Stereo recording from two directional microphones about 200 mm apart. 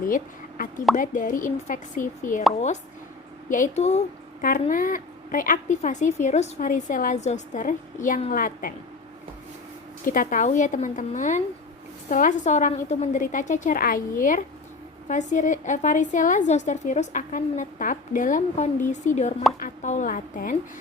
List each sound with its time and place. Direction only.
0.1 s a woman's voice: 45° left (ahead or behind)
3.5 s a woman's voice: 40° left (ahead or behind)
10.1 s a woman's voice: 40° left (ahead or behind)